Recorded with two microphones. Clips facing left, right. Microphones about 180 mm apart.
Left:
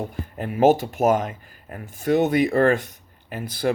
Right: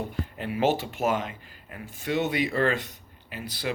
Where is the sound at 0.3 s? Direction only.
45° left (ahead or behind).